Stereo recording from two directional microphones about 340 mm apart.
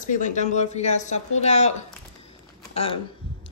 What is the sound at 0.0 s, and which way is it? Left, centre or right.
A woman's voice, left.